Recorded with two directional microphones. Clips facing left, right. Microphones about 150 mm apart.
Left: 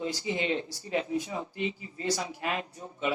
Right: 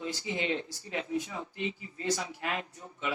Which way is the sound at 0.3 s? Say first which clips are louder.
Left 2 dB; 20° left (ahead or behind).